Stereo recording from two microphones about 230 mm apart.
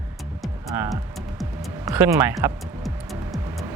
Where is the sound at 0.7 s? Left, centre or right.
Centre.